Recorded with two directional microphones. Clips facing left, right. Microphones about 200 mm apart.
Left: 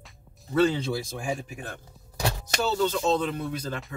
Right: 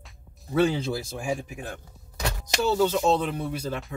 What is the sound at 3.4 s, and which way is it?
Speech, 10° right (ahead or behind).